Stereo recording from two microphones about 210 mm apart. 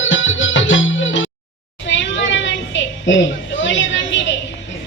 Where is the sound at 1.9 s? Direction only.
60° left (ahead or behind).